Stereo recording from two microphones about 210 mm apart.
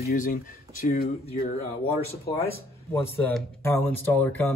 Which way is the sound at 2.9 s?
10° left (ahead or behind).